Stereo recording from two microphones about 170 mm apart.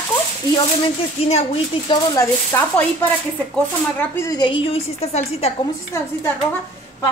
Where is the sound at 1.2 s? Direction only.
35° left (ahead or behind).